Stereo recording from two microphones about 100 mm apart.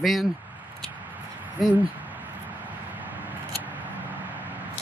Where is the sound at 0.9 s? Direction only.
15° right (ahead or behind).